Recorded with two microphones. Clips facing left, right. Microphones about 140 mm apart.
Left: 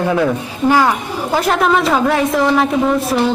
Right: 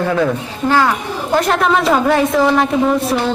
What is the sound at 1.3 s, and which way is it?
Speech, centre (ahead or behind).